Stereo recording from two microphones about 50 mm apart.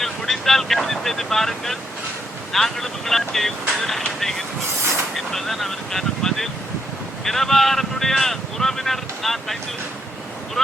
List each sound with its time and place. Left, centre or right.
0.0 s boat: centre
2.5 s speech: centre